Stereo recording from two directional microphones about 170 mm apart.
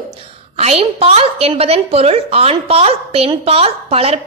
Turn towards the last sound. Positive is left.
turn(degrees=-35)  # may be behind; listen again after turning